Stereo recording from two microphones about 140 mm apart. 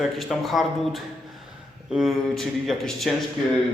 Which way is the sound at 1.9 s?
Centre (ahead or behind).